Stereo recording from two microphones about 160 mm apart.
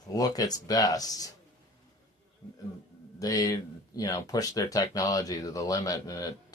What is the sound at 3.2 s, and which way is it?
Speech, 20° left (ahead or behind).